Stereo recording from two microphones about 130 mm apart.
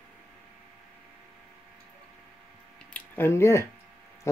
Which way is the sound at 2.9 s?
20° left (ahead or behind).